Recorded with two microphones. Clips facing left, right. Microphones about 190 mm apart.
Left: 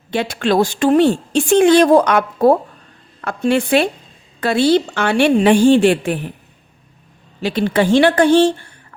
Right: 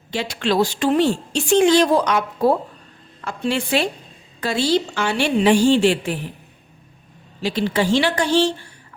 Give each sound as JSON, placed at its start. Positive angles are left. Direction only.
{"t": 0.1, "sound": "a woman's voice", "side_deg": 55}
{"t": 7.4, "sound": "a woman's voice", "side_deg": 55}